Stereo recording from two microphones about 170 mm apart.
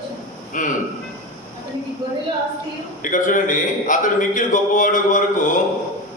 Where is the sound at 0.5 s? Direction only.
50° left (ahead or behind).